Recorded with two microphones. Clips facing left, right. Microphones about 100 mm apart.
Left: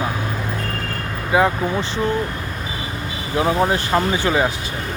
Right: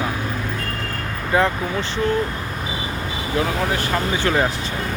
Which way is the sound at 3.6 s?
25° left (ahead or behind).